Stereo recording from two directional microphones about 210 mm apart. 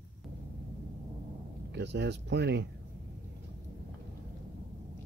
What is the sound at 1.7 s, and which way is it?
Speech, 55° right (ahead or behind).